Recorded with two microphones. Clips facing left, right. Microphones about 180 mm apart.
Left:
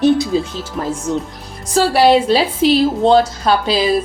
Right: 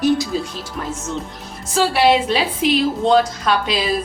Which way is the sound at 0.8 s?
35° left (ahead or behind).